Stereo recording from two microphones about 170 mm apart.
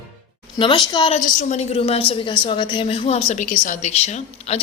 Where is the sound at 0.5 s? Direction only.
30° left (ahead or behind).